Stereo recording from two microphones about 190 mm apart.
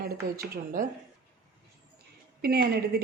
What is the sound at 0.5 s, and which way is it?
Speech, 45° right (ahead or behind).